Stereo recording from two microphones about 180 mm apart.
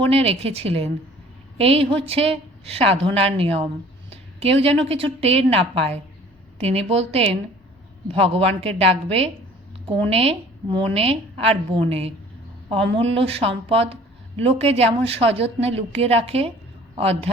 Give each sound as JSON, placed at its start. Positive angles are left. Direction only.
{"t": 0.0, "sound": "a woman's voice", "side_deg": -35}